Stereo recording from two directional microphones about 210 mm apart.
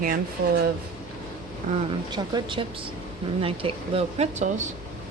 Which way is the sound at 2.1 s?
20° right (ahead or behind).